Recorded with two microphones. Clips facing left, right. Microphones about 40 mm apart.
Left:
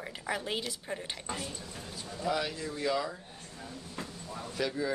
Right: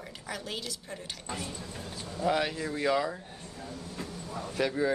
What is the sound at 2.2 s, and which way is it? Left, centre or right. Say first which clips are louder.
Speech: right 4 dB; right.